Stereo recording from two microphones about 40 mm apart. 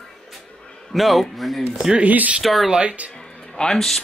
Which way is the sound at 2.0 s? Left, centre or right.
Right.